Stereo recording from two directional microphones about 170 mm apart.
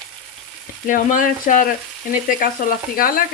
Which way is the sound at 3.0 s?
55° left (ahead or behind).